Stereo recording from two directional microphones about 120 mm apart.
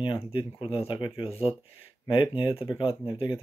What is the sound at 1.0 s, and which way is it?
Speech, 55° left (ahead or behind).